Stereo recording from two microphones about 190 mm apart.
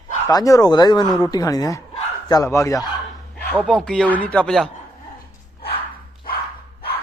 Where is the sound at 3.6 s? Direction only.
5° left (ahead or behind).